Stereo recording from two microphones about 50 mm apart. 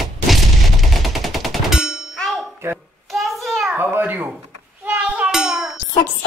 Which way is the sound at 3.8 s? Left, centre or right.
Right.